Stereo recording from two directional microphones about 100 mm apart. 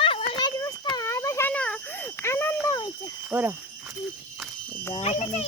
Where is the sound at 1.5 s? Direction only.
10° left (ahead or behind).